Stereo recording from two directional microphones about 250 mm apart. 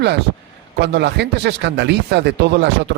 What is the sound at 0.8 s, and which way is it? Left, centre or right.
Speech, right.